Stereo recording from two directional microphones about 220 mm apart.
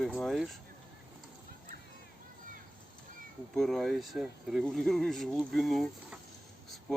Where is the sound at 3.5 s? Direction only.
Centre (ahead or behind).